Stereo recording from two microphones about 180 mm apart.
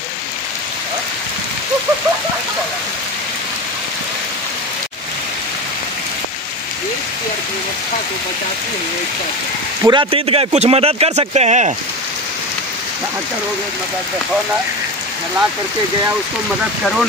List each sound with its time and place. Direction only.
9.8 s speech: 30° right (ahead or behind)